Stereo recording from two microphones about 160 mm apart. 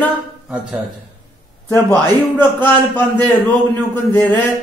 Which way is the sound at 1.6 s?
15° left (ahead or behind).